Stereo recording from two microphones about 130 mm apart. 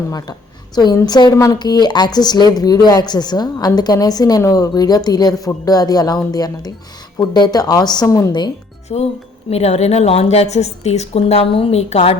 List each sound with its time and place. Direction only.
0.1 s a woman's voice: 30° left (ahead or behind)
8.9 s a woman's voice: 55° left (ahead or behind)